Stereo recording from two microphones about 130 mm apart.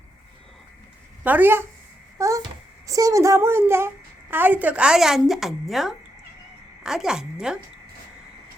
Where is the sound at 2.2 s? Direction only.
25° right (ahead or behind).